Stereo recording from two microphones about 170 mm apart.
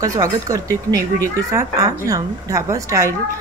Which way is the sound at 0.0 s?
20° right (ahead or behind).